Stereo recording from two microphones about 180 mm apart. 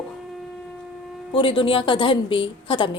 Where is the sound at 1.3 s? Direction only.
30° left (ahead or behind).